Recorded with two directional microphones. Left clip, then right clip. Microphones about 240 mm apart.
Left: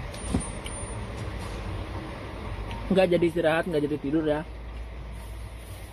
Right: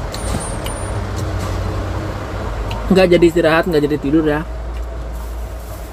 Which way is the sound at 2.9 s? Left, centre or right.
Centre.